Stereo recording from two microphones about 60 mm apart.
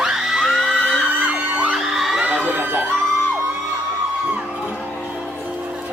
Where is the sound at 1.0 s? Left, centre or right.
Right.